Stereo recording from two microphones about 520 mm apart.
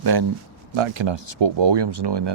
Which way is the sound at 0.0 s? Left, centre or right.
Right.